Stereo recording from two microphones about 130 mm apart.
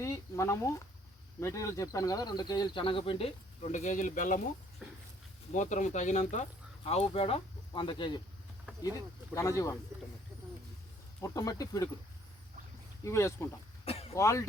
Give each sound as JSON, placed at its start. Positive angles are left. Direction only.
{"t": 0.0, "sound": "a sound", "side_deg": 25}
{"t": 1.4, "sound": "speech", "side_deg": 20}
{"t": 5.5, "sound": "speech", "side_deg": 70}
{"t": 6.8, "sound": "speech", "side_deg": 50}
{"t": 8.8, "sound": "speech", "side_deg": 25}
{"t": 11.2, "sound": "speech", "side_deg": 30}
{"t": 13.1, "sound": "speech", "side_deg": 20}
{"t": 13.8, "sound": "throat clearing", "side_deg": 50}
{"t": 14.1, "sound": "speech", "side_deg": 25}